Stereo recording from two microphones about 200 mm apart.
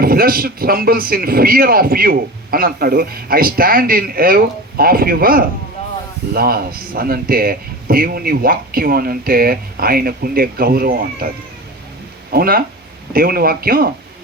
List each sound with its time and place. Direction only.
0.0 s speech: 50° right (ahead or behind)
12.3 s speech: 50° right (ahead or behind)